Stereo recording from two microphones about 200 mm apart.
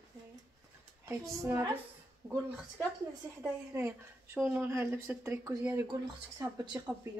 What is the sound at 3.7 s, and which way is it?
Speech, 15° right (ahead or behind).